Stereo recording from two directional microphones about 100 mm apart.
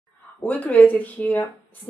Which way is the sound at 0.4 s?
15° left (ahead or behind).